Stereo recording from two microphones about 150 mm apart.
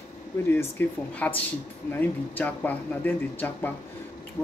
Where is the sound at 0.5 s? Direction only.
15° left (ahead or behind).